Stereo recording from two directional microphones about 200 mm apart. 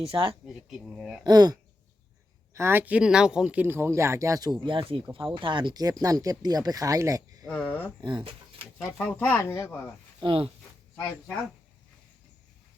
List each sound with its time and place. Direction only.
0.0 s speech: 25° right (ahead or behind)
0.4 s speech: centre (ahead or behind)
1.2 s speech: 20° right (ahead or behind)
2.6 s speech: 10° right (ahead or behind)
7.4 s speech: 5° left (ahead or behind)
8.0 s speech: 25° right (ahead or behind)
9.0 s speech: 10° left (ahead or behind)
10.2 s speech: 30° right (ahead or behind)